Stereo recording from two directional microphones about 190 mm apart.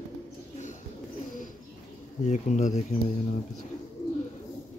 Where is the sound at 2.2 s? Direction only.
40° left (ahead or behind).